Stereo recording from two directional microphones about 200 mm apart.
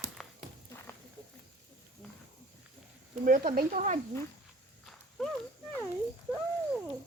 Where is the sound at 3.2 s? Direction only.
40° right (ahead or behind).